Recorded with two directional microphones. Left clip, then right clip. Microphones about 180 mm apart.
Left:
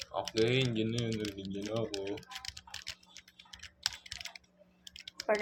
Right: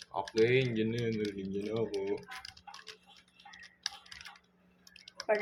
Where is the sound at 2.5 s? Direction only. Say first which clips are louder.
Left 4 dB; 55° left (ahead or behind).